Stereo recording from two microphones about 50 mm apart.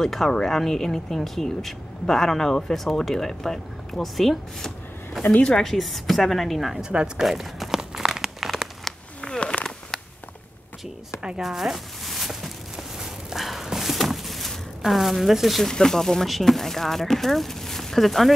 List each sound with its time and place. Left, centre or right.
0.0 s speech: centre
5.3 s a woman's voice: centre
5.6 s speech: centre
6.8 s speech: centre
7.2 s crumpling: centre
9.2 s a sound: centre
11.4 s a sound: centre
14.9 s speech: centre
15.6 s speech: centre